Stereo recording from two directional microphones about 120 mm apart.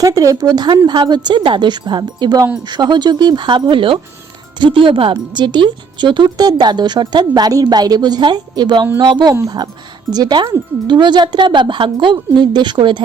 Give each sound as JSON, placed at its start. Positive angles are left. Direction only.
{"t": 0.0, "sound": "speech", "side_deg": -30}